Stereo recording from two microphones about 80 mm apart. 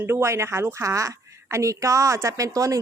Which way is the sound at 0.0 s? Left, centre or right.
Right.